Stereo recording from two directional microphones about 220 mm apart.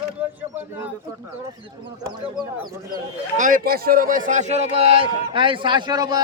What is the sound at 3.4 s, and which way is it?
A man's voice, 40° right (ahead or behind).